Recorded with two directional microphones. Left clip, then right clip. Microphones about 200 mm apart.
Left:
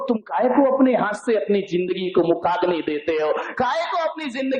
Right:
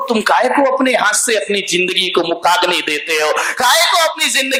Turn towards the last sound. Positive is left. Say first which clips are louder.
# right 10 dB
turn(degrees=-10)  # may be behind; listen again after turning